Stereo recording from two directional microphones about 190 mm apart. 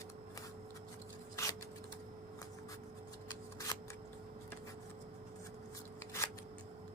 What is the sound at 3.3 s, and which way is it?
Shuffling cards, 20° left (ahead or behind).